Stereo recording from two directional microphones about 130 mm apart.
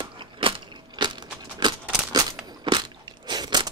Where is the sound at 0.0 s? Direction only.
40° right (ahead or behind).